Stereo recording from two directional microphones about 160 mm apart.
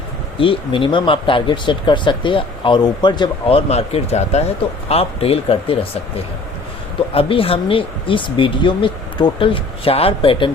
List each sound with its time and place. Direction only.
0.3 s speech: 35° left (ahead or behind)
7.1 s speech: 35° left (ahead or behind)